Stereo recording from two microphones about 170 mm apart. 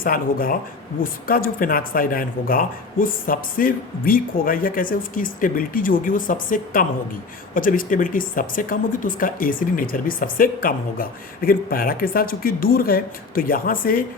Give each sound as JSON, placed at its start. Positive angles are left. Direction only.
{"t": 0.0, "sound": "speech", "side_deg": 55}